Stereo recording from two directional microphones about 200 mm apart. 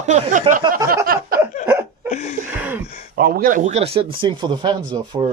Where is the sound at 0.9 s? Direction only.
45° right (ahead or behind).